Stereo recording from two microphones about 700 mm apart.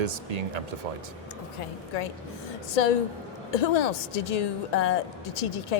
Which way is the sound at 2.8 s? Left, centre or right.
Left.